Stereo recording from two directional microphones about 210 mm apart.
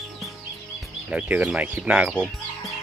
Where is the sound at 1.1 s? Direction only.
5° right (ahead or behind).